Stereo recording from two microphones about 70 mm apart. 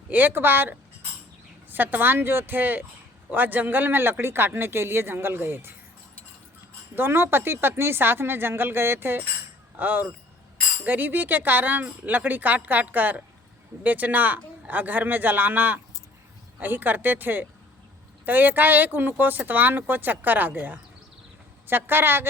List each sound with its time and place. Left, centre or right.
0.1 s speech: right
6.9 s speech: right